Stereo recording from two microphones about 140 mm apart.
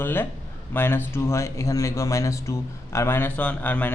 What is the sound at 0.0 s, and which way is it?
Speech, 15° left (ahead or behind).